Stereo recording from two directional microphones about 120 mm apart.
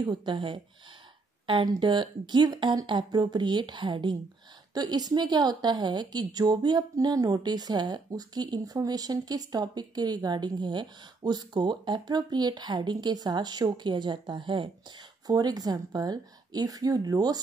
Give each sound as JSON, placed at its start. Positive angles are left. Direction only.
{"t": 0.0, "sound": "a woman's voice", "side_deg": -40}
{"t": 1.8, "sound": "a woman's voice", "side_deg": -40}
{"t": 15.2, "sound": "a woman's voice", "side_deg": -35}